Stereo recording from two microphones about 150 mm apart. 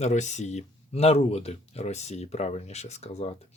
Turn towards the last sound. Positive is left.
turn(degrees=45)  # may be behind; listen again after turning